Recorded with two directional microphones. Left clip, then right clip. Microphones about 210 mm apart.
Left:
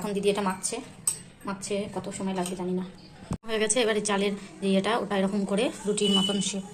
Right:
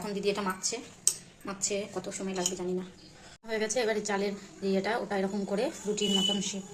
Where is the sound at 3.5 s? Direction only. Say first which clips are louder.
Left 4 dB; 10° left (ahead or behind).